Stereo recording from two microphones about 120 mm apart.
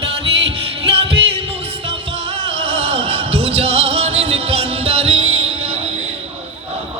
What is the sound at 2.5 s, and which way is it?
Music, 50° right (ahead or behind).